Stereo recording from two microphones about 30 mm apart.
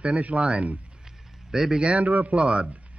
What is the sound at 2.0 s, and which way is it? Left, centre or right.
Speech, right.